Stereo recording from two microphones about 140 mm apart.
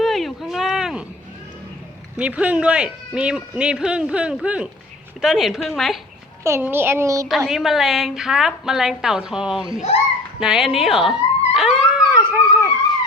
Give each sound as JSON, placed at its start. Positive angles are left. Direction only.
{"t": 0.0, "sound": "a sound", "side_deg": 0}
{"t": 2.1, "sound": "a man's voice", "side_deg": -10}
{"t": 6.4, "sound": "speech", "side_deg": -15}
{"t": 7.3, "sound": "a woman's voice", "side_deg": 0}
{"t": 10.4, "sound": "dog", "side_deg": -5}
{"t": 12.2, "sound": "howl", "side_deg": -20}